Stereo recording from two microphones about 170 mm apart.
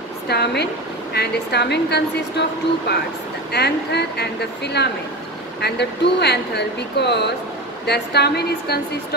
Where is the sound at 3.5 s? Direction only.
75° left (ahead or behind).